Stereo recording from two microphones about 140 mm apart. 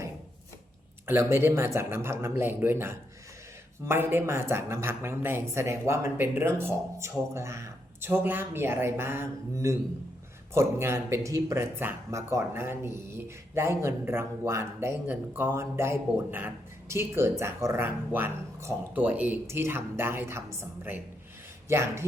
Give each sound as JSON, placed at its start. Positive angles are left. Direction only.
{"t": 1.0, "sound": "speech", "side_deg": -20}